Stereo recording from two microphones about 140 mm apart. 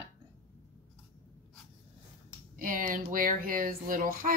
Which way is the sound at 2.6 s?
75° right (ahead or behind).